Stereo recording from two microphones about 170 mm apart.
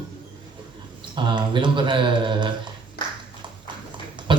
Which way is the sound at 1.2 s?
30° right (ahead or behind).